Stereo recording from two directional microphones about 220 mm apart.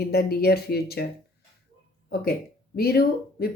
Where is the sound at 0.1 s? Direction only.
45° left (ahead or behind).